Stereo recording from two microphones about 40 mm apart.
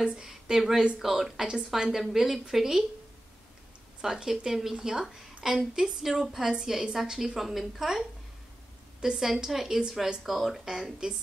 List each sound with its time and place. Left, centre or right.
0.0 s a woman's voice: centre
4.0 s a woman's voice: centre
5.5 s a woman's voice: centre
6.0 s a woman's voice: centre